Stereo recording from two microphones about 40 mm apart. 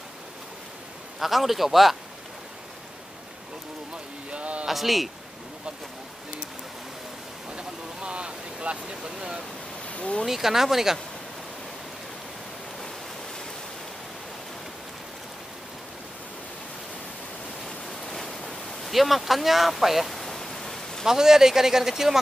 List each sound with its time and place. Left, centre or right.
1.2 s speech: centre
4.3 s a sound: right
4.6 s speech: centre
7.5 s vehicle: right
9.8 s a sound: left
10.2 s speech: centre
17.6 s a sound: centre
18.9 s speech: centre
20.2 s pink noise: centre
21.0 s speech: centre